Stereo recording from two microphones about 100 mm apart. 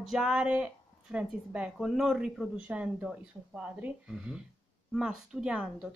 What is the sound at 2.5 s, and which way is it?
Speech, 15° right (ahead or behind).